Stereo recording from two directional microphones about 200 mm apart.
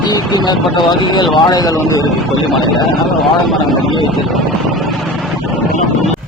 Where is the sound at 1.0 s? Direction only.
20° left (ahead or behind).